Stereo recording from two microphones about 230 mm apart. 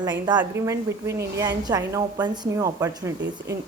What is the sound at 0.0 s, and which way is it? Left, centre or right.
A woman's voice, centre.